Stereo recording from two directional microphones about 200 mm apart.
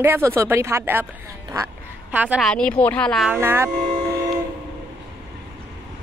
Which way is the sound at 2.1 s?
5° right (ahead or behind).